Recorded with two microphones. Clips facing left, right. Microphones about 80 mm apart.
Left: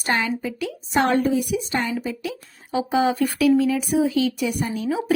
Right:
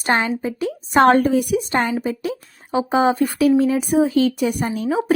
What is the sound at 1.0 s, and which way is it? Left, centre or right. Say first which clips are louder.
Speech: right 6 dB; right.